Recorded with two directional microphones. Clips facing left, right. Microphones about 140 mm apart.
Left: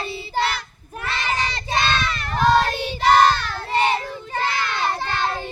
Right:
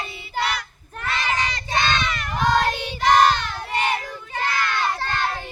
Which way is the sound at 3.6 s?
30° left (ahead or behind).